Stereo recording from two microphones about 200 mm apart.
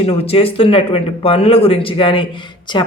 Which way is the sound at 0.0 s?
30° left (ahead or behind).